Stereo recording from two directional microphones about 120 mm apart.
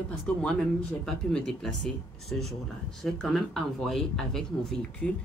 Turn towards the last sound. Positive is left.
turn(degrees=5)  # may be behind; listen again after turning